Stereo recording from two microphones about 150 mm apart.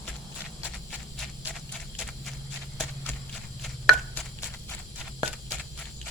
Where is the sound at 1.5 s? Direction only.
Centre (ahead or behind).